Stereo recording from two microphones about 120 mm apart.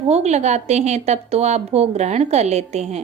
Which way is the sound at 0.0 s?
65° right (ahead or behind).